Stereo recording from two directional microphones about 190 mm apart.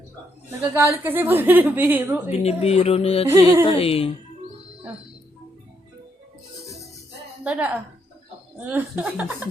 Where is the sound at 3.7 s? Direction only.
30° left (ahead or behind).